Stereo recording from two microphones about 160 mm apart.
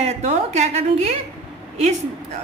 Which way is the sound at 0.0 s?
45° right (ahead or behind).